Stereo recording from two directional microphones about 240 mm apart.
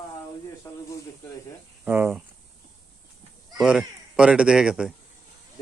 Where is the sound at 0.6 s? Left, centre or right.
Centre.